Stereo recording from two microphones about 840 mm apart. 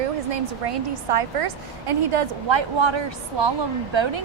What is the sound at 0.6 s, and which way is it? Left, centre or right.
A woman's voice, right.